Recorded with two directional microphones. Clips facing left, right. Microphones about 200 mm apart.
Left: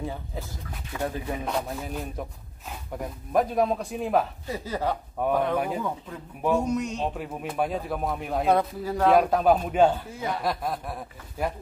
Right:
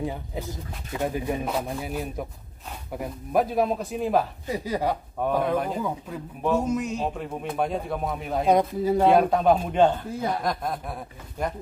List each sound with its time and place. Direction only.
0.0 s speech: 15° right (ahead or behind); by 4.3 s centre (ahead or behind)
4.5 s speech: 15° right (ahead or behind)
8.5 s speech: 15° right (ahead or behind)
9.1 s speech: 5° left (ahead or behind)